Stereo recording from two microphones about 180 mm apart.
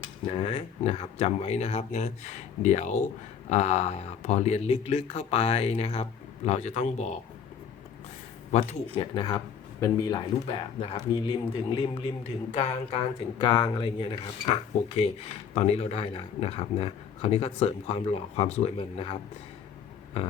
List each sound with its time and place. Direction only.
0.3 s speech: 30° left (ahead or behind)
9.0 s speech: 25° left (ahead or behind)
10.4 s speech: 35° left (ahead or behind)
13.4 s speech: 25° left (ahead or behind)